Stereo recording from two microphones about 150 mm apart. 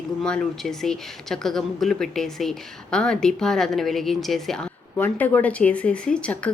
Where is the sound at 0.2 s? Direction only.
5° left (ahead or behind).